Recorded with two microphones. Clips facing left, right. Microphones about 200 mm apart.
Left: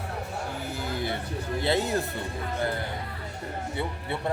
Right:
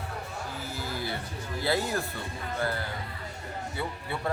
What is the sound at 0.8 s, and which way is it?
Speech, 20° left (ahead or behind).